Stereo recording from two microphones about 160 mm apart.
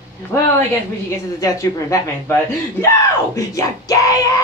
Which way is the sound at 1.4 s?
20° left (ahead or behind).